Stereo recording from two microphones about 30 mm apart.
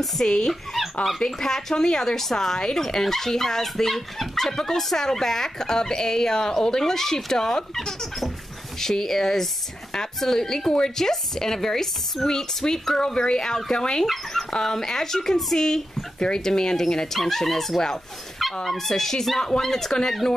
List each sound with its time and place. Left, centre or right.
0.2 s speech: left
14.3 s speech: centre
19.9 s speech: left